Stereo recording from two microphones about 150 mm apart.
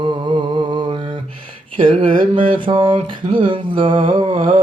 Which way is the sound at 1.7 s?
35° right (ahead or behind).